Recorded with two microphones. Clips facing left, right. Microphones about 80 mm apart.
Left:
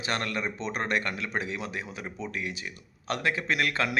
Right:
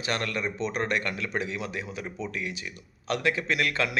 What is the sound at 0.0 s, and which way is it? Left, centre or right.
Speech, left.